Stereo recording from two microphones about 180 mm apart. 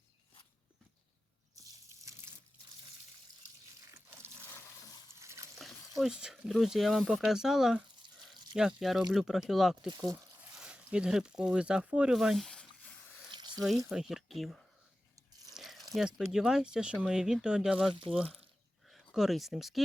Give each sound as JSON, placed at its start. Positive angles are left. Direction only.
{"t": 1.5, "sound": "water", "side_deg": -20}
{"t": 5.2, "sound": "water", "side_deg": -15}
{"t": 6.0, "sound": "speech", "side_deg": -5}
{"t": 13.3, "sound": "water", "side_deg": -25}
{"t": 13.7, "sound": "speech", "side_deg": 0}
{"t": 15.5, "sound": "a sound", "side_deg": 0}
{"t": 16.0, "sound": "speech", "side_deg": 0}